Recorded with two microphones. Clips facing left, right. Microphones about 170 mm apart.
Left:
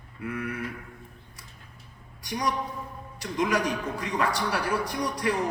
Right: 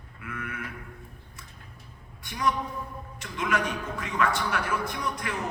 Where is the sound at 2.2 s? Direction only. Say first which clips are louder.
Right 1 dB; 35° left (ahead or behind).